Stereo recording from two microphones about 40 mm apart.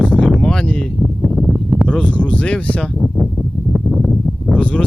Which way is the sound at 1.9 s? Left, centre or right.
Left.